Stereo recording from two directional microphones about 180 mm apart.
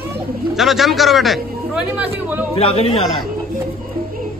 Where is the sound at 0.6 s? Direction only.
Centre (ahead or behind).